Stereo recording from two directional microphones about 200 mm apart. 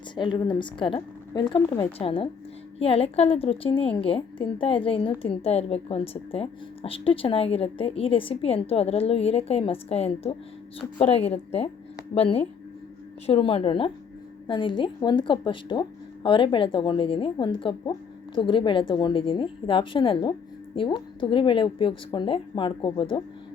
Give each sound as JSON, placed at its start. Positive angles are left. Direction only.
{"t": 0.2, "sound": "a woman's voice", "side_deg": 25}